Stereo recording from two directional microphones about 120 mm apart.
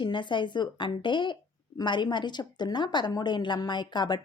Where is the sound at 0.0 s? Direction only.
40° left (ahead or behind).